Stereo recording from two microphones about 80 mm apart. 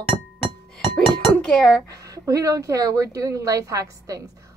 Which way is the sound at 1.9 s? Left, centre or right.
Right.